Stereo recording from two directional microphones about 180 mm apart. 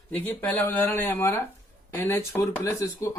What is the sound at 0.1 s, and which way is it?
Speech, 10° left (ahead or behind).